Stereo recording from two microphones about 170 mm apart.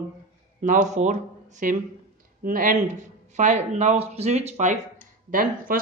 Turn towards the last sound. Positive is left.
turn(degrees=-55)  # may be behind; listen again after turning